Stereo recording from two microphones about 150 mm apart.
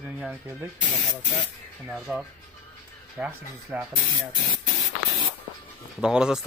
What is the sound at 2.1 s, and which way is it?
Speech, 10° right (ahead or behind).